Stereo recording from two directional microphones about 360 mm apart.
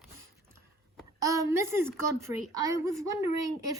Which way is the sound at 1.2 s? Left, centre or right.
Centre.